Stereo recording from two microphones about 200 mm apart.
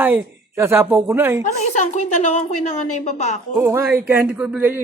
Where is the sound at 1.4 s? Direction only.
35° left (ahead or behind).